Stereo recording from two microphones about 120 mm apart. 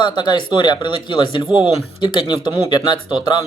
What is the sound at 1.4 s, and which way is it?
Speech, 10° right (ahead or behind).